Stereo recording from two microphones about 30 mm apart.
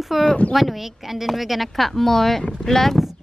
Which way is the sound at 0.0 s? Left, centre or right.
Centre.